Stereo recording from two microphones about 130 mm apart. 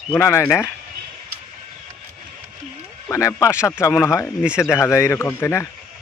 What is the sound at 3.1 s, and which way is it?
Speech, 25° left (ahead or behind).